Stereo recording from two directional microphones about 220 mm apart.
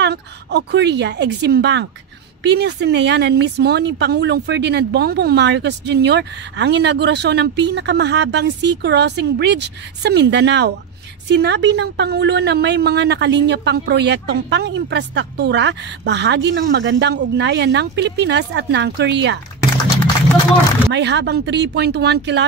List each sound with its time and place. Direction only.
0.0 s a woman's voice: 50° right (ahead or behind)
20.9 s a woman's voice: 50° right (ahead or behind)